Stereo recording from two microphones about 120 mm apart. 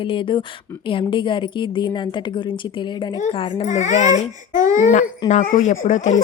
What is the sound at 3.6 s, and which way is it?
Speech, 90° left.